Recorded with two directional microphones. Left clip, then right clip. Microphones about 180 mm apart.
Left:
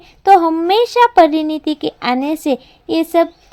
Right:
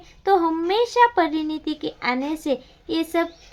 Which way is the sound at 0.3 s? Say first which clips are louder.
Left 9 dB; 35° left (ahead or behind).